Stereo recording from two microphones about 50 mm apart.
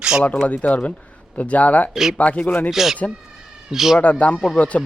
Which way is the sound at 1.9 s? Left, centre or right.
Centre.